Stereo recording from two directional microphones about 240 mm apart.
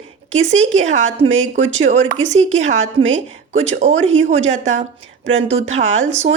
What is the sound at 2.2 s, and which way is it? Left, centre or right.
Speech, right.